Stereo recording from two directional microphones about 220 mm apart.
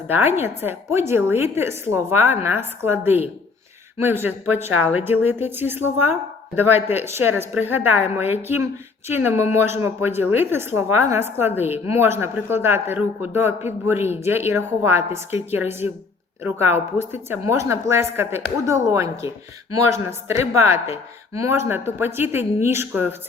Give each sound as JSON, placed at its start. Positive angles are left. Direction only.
{"t": 0.3, "sound": "a woman's voice", "side_deg": -10}